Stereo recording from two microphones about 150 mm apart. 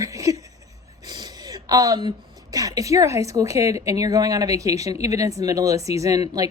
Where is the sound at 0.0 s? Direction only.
20° right (ahead or behind).